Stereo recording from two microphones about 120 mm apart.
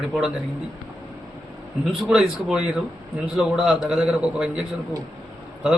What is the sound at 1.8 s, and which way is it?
A man's voice, 5° right (ahead or behind).